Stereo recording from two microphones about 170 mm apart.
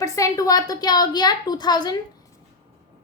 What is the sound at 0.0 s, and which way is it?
A woman's voice, 20° left (ahead or behind).